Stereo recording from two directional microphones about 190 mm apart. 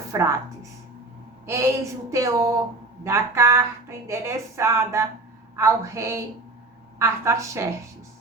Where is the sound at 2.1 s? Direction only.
15° right (ahead or behind).